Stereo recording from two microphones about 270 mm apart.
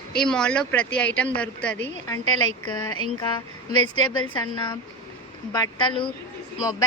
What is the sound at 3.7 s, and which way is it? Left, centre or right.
Speech, left.